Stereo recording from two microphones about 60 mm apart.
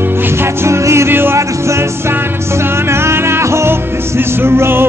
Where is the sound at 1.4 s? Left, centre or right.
Right.